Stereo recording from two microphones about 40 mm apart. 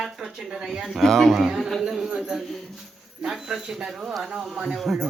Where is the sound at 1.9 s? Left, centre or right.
Centre.